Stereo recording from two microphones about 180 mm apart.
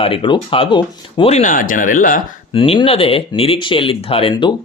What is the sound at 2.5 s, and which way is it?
Speech, 30° left (ahead or behind).